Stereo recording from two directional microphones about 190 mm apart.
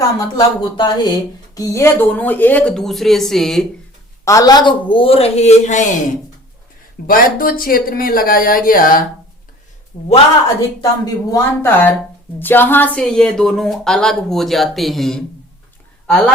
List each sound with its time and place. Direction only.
0.3 s speech: 25° left (ahead or behind); by 3.7 s centre (ahead or behind)
4.3 s a woman's voice: 20° left (ahead or behind); by 5.8 s 35° left (ahead or behind)
7.1 s speech: 50° left (ahead or behind)
9.9 s a woman's voice: 30° left (ahead or behind)
10.8 s a woman's voice: 20° left (ahead or behind)